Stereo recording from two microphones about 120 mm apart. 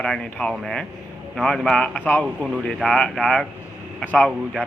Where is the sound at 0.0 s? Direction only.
5° left (ahead or behind).